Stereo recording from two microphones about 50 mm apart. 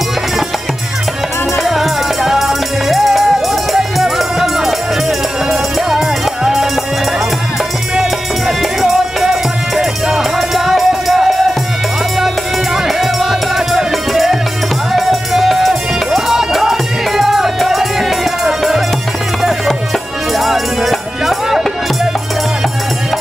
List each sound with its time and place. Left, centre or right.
1.6 s music: centre
7.9 s music: centre
12.8 s music: centre
20.3 s music: centre